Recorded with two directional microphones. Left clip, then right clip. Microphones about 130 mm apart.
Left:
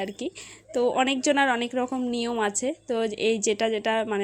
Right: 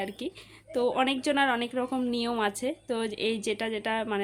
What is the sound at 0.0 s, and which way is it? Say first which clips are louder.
A woman's voice: left 3 dB; 20° left (ahead or behind).